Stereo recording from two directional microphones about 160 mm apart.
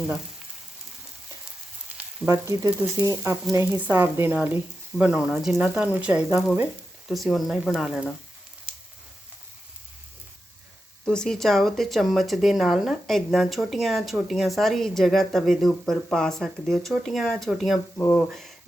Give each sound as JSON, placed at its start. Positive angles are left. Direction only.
{"t": 2.2, "sound": "frying", "side_deg": -20}
{"t": 3.5, "sound": "speech", "side_deg": -15}
{"t": 7.1, "sound": "speech", "side_deg": 0}
{"t": 11.0, "sound": "speech", "side_deg": 5}
{"t": 17.9, "sound": "speech", "side_deg": 10}